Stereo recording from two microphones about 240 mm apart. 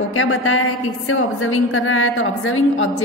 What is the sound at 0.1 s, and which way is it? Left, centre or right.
A woman's voice, left.